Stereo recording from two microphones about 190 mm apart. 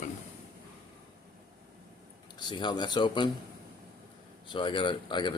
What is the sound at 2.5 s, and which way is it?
Speech, 25° left (ahead or behind).